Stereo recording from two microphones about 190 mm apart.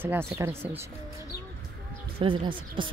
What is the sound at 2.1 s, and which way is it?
Speech, 25° right (ahead or behind).